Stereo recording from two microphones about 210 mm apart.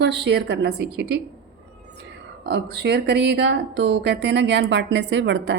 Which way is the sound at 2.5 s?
50° right (ahead or behind).